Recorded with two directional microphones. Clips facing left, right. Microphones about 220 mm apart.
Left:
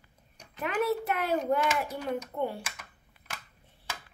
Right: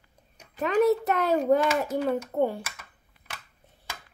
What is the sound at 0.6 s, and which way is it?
Child singing, 40° right (ahead or behind).